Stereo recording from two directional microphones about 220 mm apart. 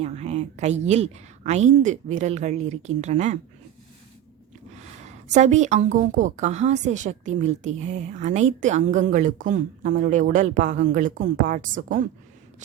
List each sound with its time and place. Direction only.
0.0 s a woman's voice: 30° right (ahead or behind)
5.0 s a woman's voice: 30° right (ahead or behind)